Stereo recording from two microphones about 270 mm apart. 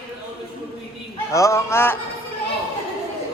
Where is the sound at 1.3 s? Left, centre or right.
Centre.